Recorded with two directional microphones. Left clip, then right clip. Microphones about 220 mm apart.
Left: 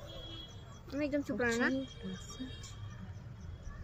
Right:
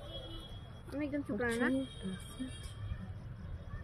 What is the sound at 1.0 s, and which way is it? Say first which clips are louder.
Speech: left 3 dB; 50° left (ahead or behind).